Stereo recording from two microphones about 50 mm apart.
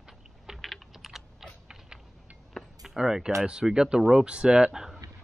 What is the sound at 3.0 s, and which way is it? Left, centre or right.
Speech, centre.